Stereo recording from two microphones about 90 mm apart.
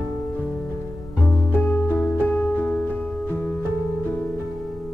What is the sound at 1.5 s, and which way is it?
Music, 20° left (ahead or behind).